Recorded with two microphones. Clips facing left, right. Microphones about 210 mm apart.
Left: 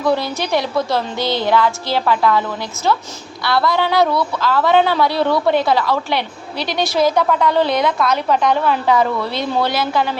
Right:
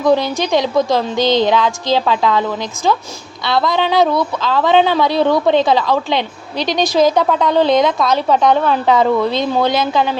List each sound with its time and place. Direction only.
0.0 s speech: 15° right (ahead or behind)
3.4 s speech: 20° right (ahead or behind)